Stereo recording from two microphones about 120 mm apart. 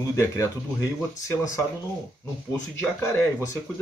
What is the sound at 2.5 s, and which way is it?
Speech, 20° left (ahead or behind).